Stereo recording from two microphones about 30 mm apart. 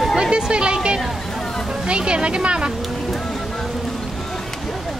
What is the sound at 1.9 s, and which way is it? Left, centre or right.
Speech, right.